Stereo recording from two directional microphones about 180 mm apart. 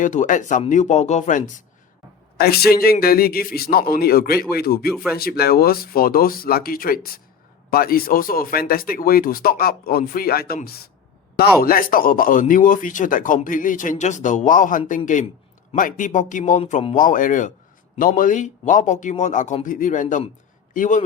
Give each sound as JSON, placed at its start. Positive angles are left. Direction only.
{"t": 0.0, "sound": "a man's voice", "side_deg": 45}
{"t": 2.4, "sound": "a man's voice", "side_deg": 60}